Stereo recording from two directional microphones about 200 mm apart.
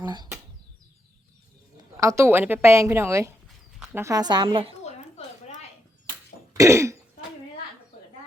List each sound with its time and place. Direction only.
0.0 s speech: 20° right (ahead or behind)
2.0 s a woman's voice: 15° right (ahead or behind)
6.6 s throat clearing: 15° right (ahead or behind)